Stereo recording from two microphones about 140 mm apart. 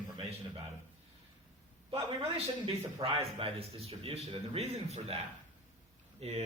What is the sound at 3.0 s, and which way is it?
A man's voice, 45° right (ahead or behind).